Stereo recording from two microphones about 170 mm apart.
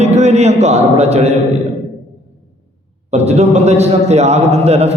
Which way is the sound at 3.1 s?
40° right (ahead or behind).